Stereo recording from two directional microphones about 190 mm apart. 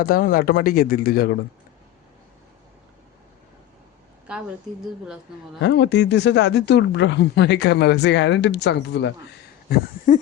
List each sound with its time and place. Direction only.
0.0 s speech: 50° left (ahead or behind)
4.3 s a woman's voice: 5° right (ahead or behind)
5.6 s speech: 65° left (ahead or behind)
9.6 s speech: 55° left (ahead or behind)